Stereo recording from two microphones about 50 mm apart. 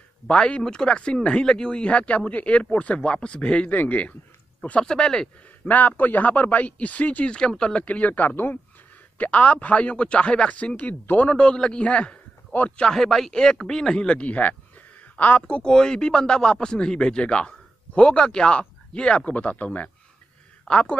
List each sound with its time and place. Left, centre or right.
0.3 s speech: left
4.8 s speech: centre
5.7 s a man's voice: left
7.3 s speech: centre; by 8.5 s left
9.2 s speech: left
12.8 s speech: centre; by 15.4 s left
15.4 s speech: centre; by 19.9 s left
20.6 s speech: centre